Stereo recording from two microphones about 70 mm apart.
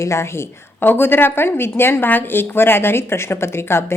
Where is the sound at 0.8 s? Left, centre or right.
Left.